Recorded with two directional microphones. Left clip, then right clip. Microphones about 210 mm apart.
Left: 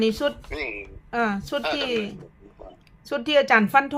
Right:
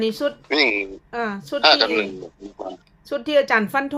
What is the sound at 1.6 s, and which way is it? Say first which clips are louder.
Speech: right 14 dB; 55° right (ahead or behind).